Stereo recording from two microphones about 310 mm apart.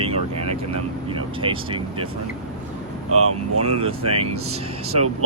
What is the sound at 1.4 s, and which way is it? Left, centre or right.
Speech, centre.